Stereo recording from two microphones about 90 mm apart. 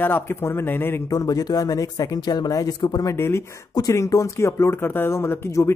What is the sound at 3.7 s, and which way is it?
Speech, 45° left (ahead or behind).